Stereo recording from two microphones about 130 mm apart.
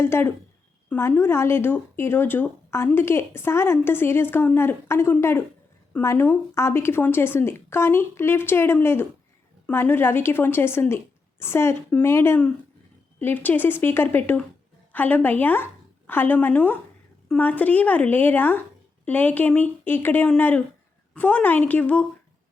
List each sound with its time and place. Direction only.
0.0 s speech: 20° left (ahead or behind)